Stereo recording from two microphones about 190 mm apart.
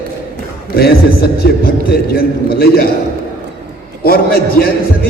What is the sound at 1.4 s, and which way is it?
A man's voice, 55° left (ahead or behind).